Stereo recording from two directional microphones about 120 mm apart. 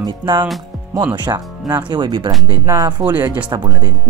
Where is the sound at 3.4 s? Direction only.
40° right (ahead or behind).